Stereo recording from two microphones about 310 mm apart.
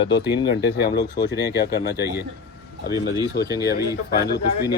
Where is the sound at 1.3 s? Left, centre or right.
Centre.